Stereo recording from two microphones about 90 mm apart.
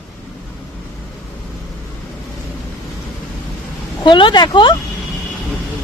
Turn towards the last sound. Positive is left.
turn(degrees=60)  # may be behind; listen again after turning